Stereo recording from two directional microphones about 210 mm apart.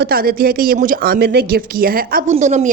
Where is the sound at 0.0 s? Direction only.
45° right (ahead or behind).